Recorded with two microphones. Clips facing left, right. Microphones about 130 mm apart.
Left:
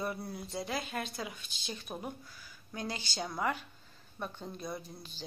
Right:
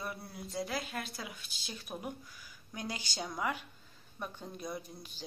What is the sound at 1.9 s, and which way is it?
Speech, 15° left (ahead or behind).